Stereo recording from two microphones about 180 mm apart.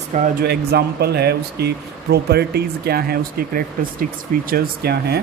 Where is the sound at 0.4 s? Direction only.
60° right (ahead or behind).